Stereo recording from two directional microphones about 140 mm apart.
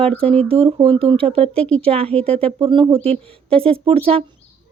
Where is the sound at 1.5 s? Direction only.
10° left (ahead or behind).